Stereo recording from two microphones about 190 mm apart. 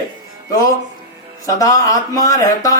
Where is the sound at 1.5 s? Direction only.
20° left (ahead or behind).